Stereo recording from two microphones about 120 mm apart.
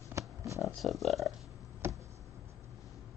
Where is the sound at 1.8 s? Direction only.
20° right (ahead or behind).